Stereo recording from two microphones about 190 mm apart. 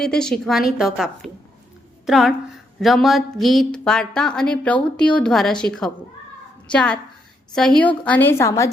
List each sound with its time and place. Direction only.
0.0 s a woman's voice: 5° left (ahead or behind)